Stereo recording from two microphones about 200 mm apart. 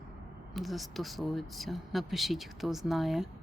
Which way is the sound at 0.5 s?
Centre (ahead or behind).